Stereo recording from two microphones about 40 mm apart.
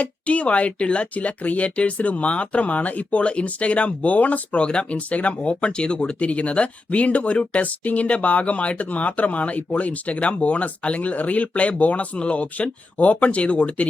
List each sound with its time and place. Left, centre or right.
0.0 s speech: left
4.6 s speech: left